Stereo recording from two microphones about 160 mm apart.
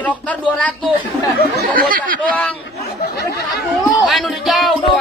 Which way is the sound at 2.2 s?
10° left (ahead or behind).